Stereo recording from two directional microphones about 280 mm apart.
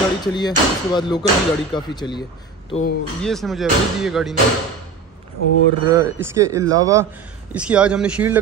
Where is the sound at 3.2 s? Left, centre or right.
Centre.